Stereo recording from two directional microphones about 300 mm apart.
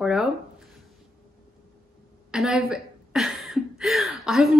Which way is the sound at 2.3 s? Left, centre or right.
Centre.